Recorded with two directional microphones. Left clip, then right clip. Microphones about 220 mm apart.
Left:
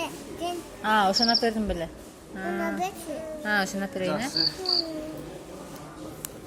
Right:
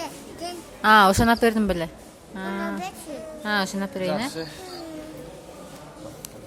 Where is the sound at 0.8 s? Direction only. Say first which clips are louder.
Right 7 dB; 30° right (ahead or behind).